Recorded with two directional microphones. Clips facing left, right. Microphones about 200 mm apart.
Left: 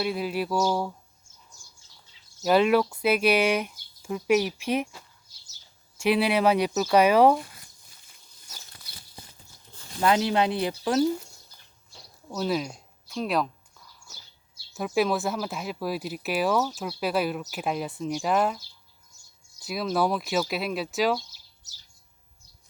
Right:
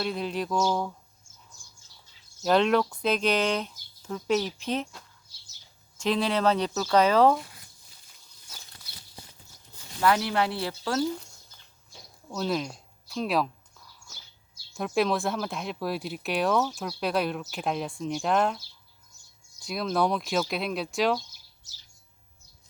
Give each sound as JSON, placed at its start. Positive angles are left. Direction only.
{"t": 0.0, "sound": "speech", "side_deg": 5}
{"t": 2.4, "sound": "speech", "side_deg": 5}
{"t": 10.0, "sound": "speech", "side_deg": 20}
{"t": 12.3, "sound": "speech", "side_deg": 5}
{"t": 14.8, "sound": "speech", "side_deg": 5}